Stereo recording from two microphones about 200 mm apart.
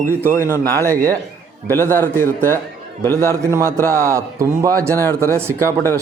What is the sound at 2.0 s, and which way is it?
Speech, 10° left (ahead or behind).